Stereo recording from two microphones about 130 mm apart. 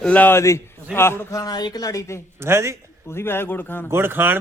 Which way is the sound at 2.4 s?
20° right (ahead or behind).